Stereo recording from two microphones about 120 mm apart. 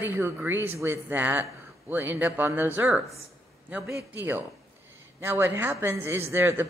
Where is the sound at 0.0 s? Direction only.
15° right (ahead or behind).